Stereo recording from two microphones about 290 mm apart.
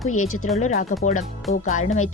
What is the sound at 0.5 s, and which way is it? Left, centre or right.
Speech, left.